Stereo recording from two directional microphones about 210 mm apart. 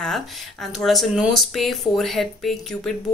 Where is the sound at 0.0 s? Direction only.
Centre (ahead or behind).